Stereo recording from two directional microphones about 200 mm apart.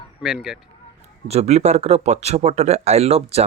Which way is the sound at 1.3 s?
30° right (ahead or behind).